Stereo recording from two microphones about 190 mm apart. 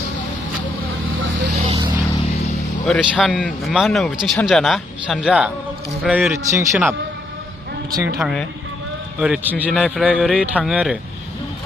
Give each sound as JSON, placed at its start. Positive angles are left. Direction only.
{"t": 1.5, "sound": "a sound", "side_deg": -30}
{"t": 2.8, "sound": "a man's voice", "side_deg": 0}
{"t": 8.2, "sound": "a man's voice", "side_deg": 0}